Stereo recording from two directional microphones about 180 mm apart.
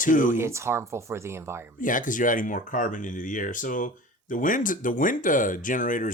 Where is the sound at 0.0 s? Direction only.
45° left (ahead or behind).